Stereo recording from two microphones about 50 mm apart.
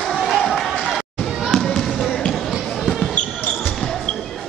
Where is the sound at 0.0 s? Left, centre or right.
Centre.